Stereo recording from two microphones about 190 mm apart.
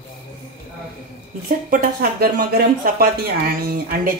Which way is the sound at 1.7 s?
50° right (ahead or behind).